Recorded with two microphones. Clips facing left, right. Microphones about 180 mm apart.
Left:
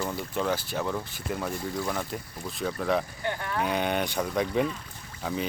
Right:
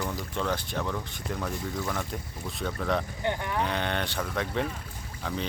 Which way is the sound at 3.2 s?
20° right (ahead or behind).